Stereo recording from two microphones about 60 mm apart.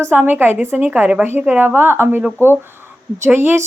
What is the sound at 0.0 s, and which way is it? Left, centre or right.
A woman's voice, right.